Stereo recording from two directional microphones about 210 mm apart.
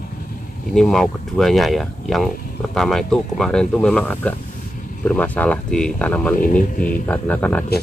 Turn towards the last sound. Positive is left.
turn(degrees=10)  # may be behind; listen again after turning